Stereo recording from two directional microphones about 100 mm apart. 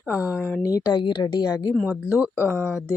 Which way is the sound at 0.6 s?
35° left (ahead or behind).